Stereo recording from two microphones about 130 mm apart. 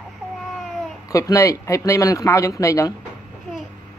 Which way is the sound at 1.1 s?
25° left (ahead or behind).